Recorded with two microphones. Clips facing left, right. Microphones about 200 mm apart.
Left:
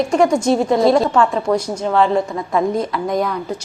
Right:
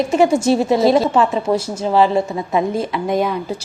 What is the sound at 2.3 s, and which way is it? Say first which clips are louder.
A woman's voice: even; 20° right (ahead or behind).